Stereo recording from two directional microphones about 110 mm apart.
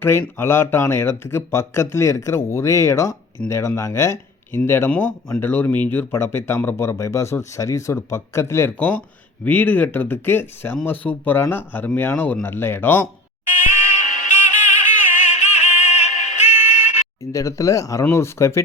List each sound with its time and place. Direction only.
0.0 s speech: 20° left (ahead or behind)
3.4 s speech: 10° left (ahead or behind)
3.8 s speech: 25° left (ahead or behind)
13.7 s music: 90° left
17.3 s speech: 30° left (ahead or behind)